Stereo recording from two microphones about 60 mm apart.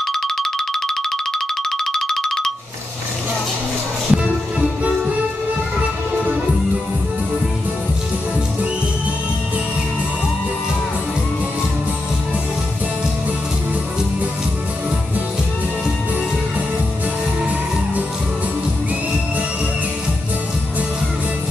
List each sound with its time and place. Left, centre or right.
0.0 s music: centre
4.1 s music: centre